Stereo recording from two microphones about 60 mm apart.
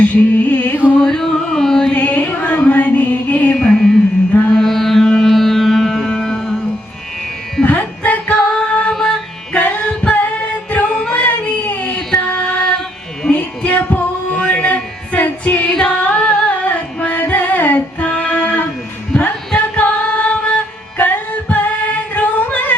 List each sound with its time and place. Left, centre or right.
0.0 s music: left
0.9 s carnatic music: centre
1.9 s music: left; by 6.5 s centre
7.6 s music: left
9.6 s music: left
11.1 s child singing: left
12.3 s music: centre
13.2 s a sound: centre
13.7 s music: left
15.7 s singing: centre
16.6 s music: left
19.5 s female singing: left
21.5 s music: left